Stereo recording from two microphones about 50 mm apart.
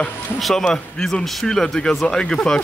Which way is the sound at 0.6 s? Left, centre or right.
Centre.